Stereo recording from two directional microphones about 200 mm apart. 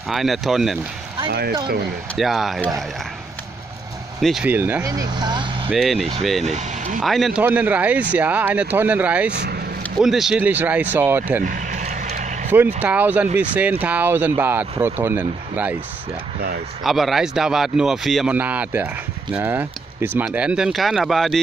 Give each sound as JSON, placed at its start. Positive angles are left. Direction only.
{"t": 0.1, "sound": "speech", "side_deg": 0}
{"t": 2.1, "sound": "speech", "side_deg": 0}
{"t": 4.2, "sound": "speech", "side_deg": 0}
{"t": 5.7, "sound": "speech", "side_deg": 0}
{"t": 6.4, "sound": "speech", "side_deg": -35}
{"t": 7.0, "sound": "speech", "side_deg": 0}
{"t": 11.4, "sound": "vehicle", "side_deg": -40}
{"t": 12.4, "sound": "speech", "side_deg": -10}
{"t": 16.3, "sound": "speech", "side_deg": -50}
{"t": 16.8, "sound": "speech", "side_deg": 0}